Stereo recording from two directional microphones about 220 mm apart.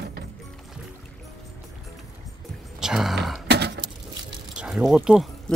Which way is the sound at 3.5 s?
50° right (ahead or behind).